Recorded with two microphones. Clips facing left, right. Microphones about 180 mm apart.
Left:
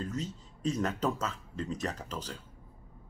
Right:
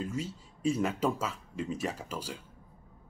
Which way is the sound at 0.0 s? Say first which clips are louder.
Right 1 dB; 10° right (ahead or behind).